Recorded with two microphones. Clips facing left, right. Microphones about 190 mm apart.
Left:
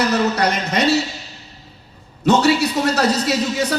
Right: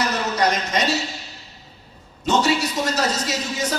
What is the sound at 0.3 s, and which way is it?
Speech, 65° left (ahead or behind).